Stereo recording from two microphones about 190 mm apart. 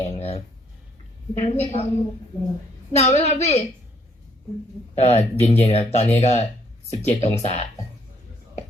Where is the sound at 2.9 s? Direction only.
35° left (ahead or behind).